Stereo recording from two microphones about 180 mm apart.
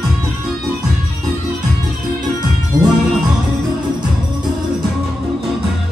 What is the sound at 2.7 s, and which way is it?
Music, 20° right (ahead or behind).